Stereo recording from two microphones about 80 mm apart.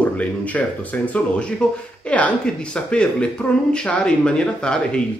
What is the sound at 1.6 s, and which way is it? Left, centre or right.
Speech, centre.